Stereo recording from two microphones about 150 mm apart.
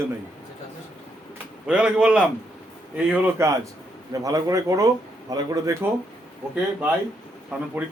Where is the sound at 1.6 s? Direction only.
5° right (ahead or behind).